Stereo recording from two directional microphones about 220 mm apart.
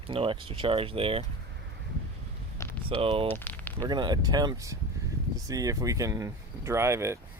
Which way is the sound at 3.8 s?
20° right (ahead or behind).